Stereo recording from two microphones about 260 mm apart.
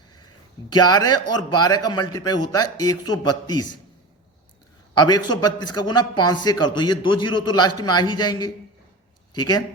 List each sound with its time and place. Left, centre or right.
0.7 s a man's voice: centre
4.9 s a man's voice: centre